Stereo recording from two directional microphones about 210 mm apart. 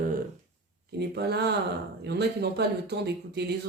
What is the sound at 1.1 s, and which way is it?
Speech, 50° right (ahead or behind).